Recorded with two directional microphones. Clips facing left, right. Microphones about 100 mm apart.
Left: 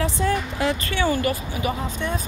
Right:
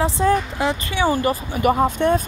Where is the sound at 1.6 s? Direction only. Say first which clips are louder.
Right 11 dB; 60° right (ahead or behind).